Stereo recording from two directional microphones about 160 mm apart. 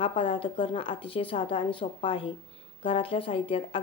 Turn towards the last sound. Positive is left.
turn(degrees=35)  # may be behind; listen again after turning